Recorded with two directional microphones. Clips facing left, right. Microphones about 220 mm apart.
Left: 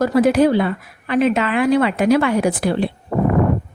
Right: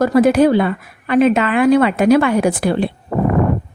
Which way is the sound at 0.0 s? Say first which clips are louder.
Right 2 dB; 55° right (ahead or behind).